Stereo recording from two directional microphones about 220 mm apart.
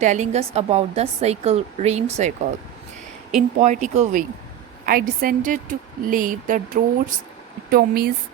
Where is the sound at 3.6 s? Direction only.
35° right (ahead or behind).